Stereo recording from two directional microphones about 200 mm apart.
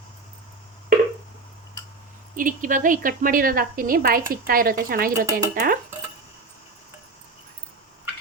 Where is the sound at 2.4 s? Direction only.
40° right (ahead or behind).